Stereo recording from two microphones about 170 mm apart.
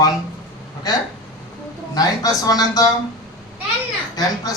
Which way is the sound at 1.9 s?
20° left (ahead or behind).